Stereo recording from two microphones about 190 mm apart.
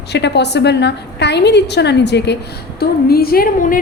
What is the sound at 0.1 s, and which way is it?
A woman's voice, 65° left (ahead or behind).